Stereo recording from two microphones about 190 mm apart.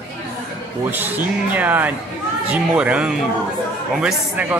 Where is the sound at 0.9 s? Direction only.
10° right (ahead or behind).